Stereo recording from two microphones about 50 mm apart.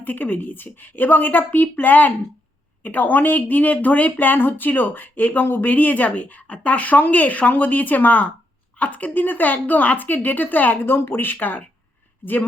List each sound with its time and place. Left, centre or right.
0.0 s speech: left
10.8 s speech: left